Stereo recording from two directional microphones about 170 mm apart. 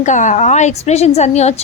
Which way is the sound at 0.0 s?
45° left (ahead or behind).